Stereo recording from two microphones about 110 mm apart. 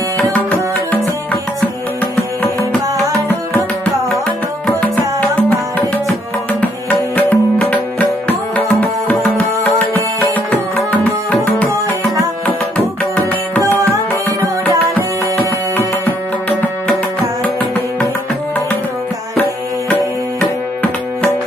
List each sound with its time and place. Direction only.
3.1 s music: 15° left (ahead or behind)
6.6 s music: 15° left (ahead or behind)
12.4 s music: 10° left (ahead or behind)
14.6 s music: 15° left (ahead or behind)